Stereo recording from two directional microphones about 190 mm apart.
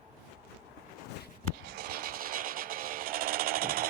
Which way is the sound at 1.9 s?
50° right (ahead or behind).